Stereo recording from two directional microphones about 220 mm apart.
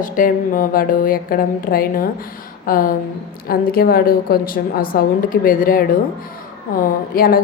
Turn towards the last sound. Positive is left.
turn(degrees=40)  # may be behind; listen again after turning